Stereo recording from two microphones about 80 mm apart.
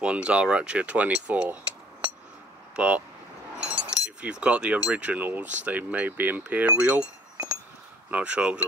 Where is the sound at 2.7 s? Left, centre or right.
Centre.